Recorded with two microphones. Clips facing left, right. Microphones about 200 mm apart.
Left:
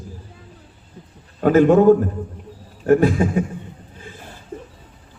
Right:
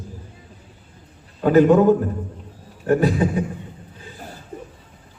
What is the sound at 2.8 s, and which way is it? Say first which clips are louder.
Speech: left 3 dB; 45° left (ahead or behind).